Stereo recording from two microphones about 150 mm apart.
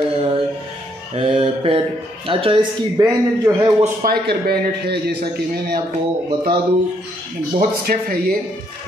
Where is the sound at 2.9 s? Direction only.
20° right (ahead or behind).